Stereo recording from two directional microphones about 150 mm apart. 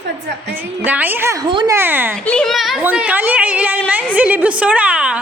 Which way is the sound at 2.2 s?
5° left (ahead or behind).